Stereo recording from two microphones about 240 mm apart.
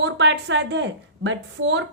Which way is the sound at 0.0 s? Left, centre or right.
Right.